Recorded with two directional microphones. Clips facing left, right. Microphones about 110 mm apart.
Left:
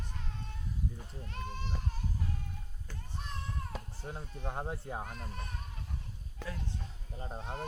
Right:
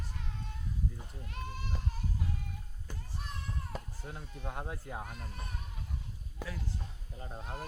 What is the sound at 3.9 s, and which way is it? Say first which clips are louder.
Speech: left 2 dB; 30° left (ahead or behind).